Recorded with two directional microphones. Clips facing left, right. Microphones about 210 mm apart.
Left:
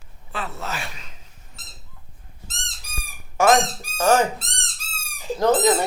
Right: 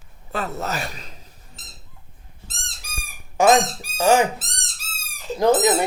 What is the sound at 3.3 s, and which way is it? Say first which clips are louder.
Speech: right 1 dB; 15° right (ahead or behind).